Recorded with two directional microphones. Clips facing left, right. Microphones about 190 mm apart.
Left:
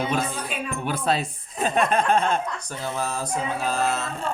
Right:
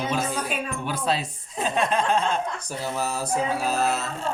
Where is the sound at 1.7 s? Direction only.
55° left (ahead or behind).